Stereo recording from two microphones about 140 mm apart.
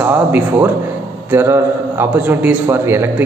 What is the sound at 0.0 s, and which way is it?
A man's voice, 15° right (ahead or behind).